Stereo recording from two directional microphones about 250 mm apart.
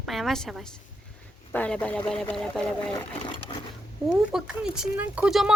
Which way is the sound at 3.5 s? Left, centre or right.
Left.